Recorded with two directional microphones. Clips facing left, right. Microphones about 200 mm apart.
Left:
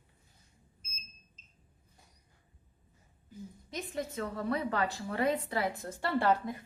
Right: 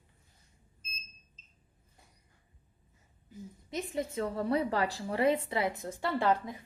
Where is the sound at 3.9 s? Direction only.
30° right (ahead or behind).